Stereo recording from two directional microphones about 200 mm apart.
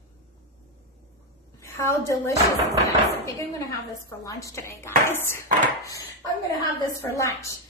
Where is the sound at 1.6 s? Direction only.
15° left (ahead or behind).